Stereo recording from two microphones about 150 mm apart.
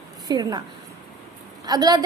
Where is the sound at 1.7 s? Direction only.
25° right (ahead or behind).